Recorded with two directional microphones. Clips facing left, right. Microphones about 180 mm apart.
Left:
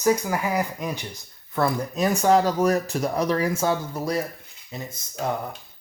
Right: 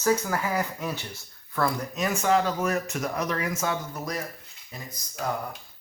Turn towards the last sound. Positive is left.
turn(degrees=25)  # may be behind; listen again after turning